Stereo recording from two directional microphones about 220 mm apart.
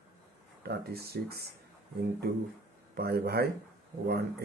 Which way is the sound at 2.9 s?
45° right (ahead or behind).